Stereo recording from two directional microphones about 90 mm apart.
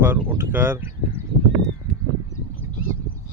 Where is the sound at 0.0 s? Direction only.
25° right (ahead or behind).